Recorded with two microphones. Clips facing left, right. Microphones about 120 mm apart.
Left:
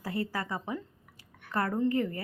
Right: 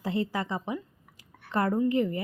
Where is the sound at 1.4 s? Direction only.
25° right (ahead or behind).